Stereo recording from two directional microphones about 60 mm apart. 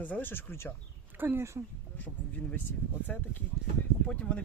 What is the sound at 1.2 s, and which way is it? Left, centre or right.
Speech, right.